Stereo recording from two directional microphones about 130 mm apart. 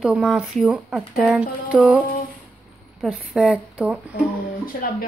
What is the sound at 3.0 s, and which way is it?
Speech, centre (ahead or behind).